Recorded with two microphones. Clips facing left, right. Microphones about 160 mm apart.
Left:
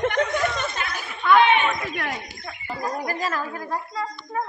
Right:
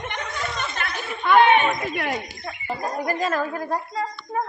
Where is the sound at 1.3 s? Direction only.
50° right (ahead or behind).